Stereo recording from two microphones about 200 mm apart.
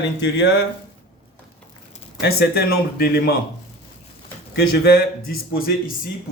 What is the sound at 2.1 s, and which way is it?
Speech, 55° left (ahead or behind).